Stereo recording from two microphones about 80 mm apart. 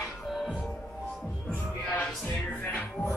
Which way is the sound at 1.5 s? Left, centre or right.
Centre.